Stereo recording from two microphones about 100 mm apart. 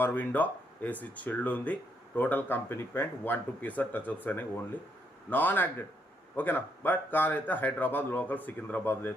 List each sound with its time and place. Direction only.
0.0 s speech: 20° left (ahead or behind)